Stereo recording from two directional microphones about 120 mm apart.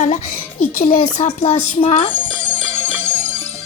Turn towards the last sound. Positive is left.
turn(degrees=15)  # may be behind; listen again after turning